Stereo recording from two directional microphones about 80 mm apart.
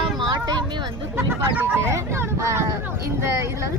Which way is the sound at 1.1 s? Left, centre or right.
Right.